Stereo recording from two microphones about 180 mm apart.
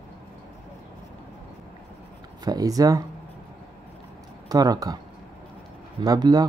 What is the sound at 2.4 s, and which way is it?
Speech, 20° right (ahead or behind).